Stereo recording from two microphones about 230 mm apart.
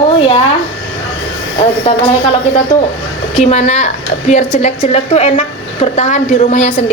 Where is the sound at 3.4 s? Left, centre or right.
Left.